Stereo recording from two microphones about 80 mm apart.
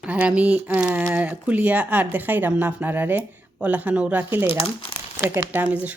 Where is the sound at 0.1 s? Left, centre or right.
Centre.